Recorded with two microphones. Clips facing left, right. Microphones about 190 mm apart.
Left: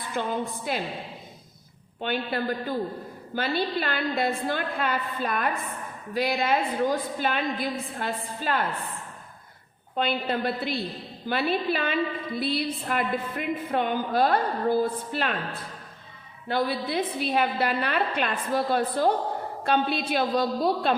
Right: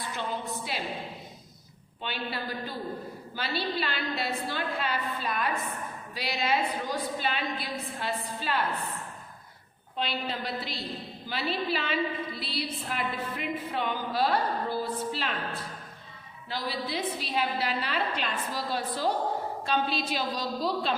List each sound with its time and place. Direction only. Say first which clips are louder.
0.1 s a woman's voice: left 7 dB; 50° left (ahead or behind)
2.0 s a woman's voice: left 7 dB; 50° left (ahead or behind)
9.9 s a woman's voice: left 6 dB; 50° left (ahead or behind)
16.5 s a woman's voice: left 7 dB; 55° left (ahead or behind)